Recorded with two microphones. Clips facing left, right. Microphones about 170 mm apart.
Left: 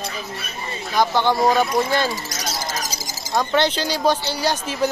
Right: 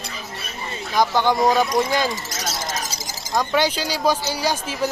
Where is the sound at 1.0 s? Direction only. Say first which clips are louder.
Even; 15° right (ahead or behind).